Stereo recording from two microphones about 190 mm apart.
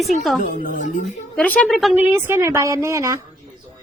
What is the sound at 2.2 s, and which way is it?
Speech, 15° right (ahead or behind).